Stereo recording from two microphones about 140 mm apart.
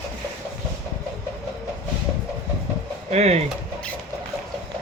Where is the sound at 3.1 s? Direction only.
50° right (ahead or behind).